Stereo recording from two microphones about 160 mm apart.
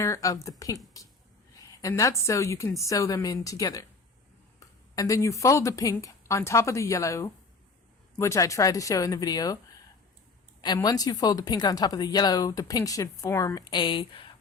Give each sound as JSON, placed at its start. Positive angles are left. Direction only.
{"t": 0.0, "sound": "speech", "side_deg": 20}
{"t": 4.9, "sound": "speech", "side_deg": 20}
{"t": 10.8, "sound": "speech", "side_deg": 25}